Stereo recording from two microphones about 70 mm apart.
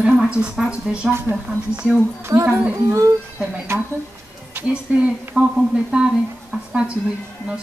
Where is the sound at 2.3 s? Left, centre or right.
Right.